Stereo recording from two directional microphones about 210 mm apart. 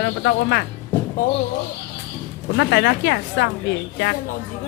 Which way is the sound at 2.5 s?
55° left (ahead or behind).